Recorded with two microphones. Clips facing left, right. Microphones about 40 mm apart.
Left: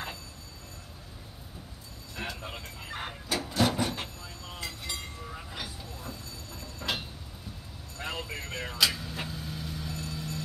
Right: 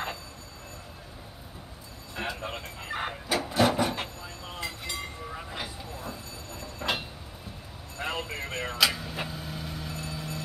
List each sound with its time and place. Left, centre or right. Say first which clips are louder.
2.1 s a sound: right 4 dB; centre
4.9 s train: right 4 dB; centre
8.0 s vehicle: right 4 dB; centre